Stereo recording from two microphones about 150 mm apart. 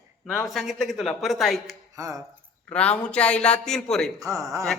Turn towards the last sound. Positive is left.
turn(degrees=-20)  # may be behind; listen again after turning